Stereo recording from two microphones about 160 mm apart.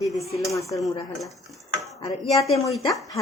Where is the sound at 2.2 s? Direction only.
35° left (ahead or behind).